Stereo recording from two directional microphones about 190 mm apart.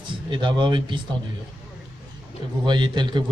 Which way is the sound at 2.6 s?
25° right (ahead or behind).